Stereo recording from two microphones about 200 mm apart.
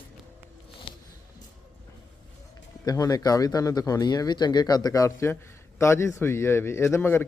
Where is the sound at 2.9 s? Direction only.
20° left (ahead or behind).